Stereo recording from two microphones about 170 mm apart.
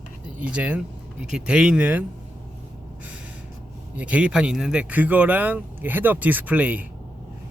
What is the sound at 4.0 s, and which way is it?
Speech, 5° right (ahead or behind).